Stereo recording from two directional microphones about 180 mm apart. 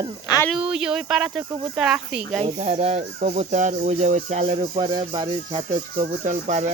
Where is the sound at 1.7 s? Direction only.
5° right (ahead or behind).